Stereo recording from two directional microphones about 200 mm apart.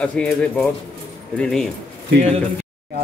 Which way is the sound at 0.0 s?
5° left (ahead or behind).